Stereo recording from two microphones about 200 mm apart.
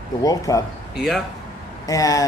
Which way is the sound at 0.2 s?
15° left (ahead or behind).